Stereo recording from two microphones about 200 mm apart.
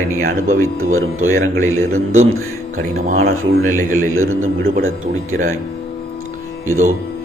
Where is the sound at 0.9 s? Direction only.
90° right.